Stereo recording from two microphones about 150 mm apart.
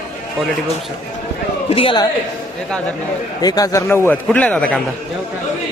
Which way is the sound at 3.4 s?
25° left (ahead or behind).